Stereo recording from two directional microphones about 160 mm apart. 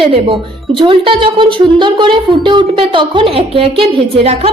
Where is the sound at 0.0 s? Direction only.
35° right (ahead or behind).